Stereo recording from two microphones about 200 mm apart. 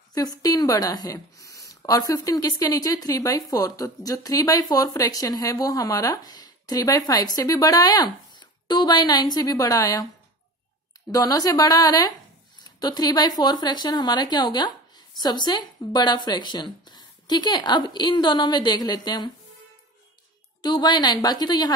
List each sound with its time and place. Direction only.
0.1 s speech: 20° left (ahead or behind)
11.1 s speech: 15° left (ahead or behind)
20.6 s speech: 20° left (ahead or behind)